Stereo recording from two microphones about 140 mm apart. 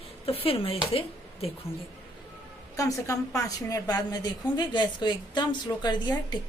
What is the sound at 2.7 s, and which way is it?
A woman's voice, 25° left (ahead or behind).